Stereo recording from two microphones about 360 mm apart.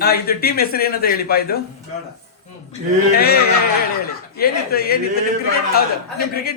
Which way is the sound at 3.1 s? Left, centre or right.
Left.